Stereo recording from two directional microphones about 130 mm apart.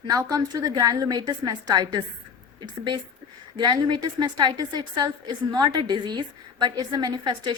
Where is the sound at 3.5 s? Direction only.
35° right (ahead or behind).